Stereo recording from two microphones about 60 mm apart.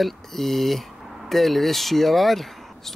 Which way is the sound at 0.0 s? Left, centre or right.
Centre.